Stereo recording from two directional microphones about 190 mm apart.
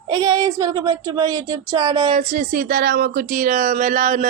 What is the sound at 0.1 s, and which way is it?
Speech, 20° right (ahead or behind).